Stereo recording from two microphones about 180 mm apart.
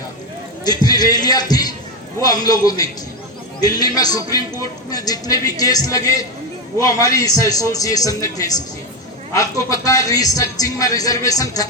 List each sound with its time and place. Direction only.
0.6 s speech: 20° left (ahead or behind)